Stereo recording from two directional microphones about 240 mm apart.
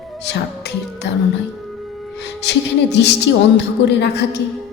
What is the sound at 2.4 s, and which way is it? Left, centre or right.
A woman's voice, left.